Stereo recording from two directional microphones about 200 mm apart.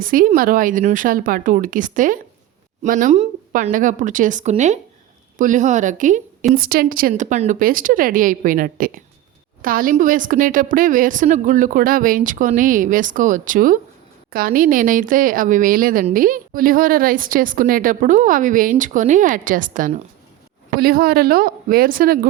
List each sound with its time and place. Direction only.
0.0 s speech: 45° right (ahead or behind)